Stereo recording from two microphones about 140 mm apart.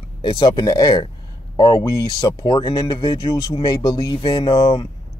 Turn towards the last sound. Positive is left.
turn(degrees=30)  # may be behind; listen again after turning